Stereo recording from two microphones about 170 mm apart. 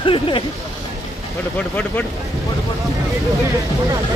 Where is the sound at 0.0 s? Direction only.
30° left (ahead or behind).